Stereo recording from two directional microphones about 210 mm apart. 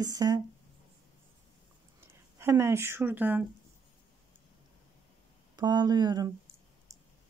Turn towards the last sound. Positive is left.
turn(degrees=-20)  # may be behind; listen again after turning